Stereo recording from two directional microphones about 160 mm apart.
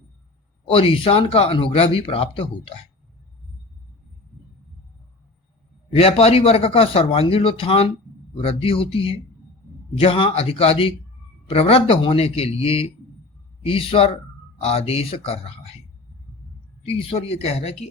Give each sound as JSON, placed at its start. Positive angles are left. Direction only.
{"t": 0.7, "sound": "speech", "side_deg": 35}
{"t": 5.9, "sound": "speech", "side_deg": 40}
{"t": 17.1, "sound": "speech", "side_deg": 40}